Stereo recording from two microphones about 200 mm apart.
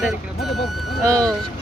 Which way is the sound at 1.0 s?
15° right (ahead or behind).